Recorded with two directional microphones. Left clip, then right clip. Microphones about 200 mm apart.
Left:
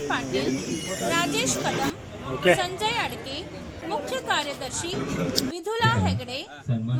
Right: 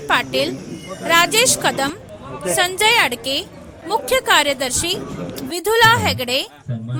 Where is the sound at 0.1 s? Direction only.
50° right (ahead or behind).